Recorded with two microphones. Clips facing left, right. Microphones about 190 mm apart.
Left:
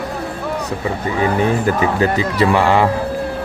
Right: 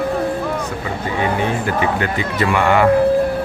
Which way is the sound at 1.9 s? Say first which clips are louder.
Left 4 dB; 35° left (ahead or behind).